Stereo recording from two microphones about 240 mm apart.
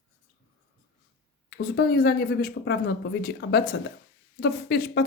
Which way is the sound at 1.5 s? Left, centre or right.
Left.